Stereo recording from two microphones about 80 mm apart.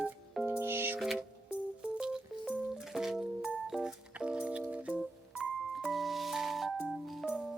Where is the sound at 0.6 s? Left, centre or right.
Right.